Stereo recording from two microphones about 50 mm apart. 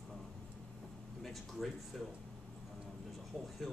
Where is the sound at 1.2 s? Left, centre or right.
Centre.